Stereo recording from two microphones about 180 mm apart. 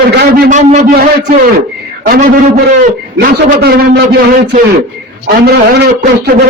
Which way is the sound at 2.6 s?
55° right (ahead or behind).